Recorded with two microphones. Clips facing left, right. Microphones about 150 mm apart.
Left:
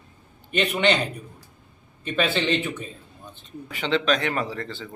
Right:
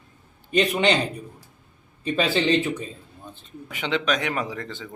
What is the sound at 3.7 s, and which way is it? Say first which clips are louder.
Speech: left 2 dB; 15° right (ahead or behind).